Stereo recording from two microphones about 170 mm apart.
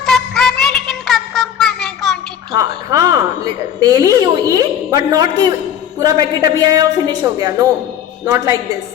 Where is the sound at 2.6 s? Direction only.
20° right (ahead or behind).